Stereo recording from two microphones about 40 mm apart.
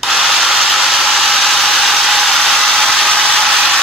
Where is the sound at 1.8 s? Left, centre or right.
Centre; by 3.4 s left.